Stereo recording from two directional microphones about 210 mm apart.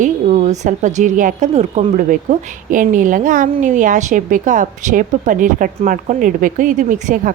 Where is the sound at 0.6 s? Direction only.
35° right (ahead or behind).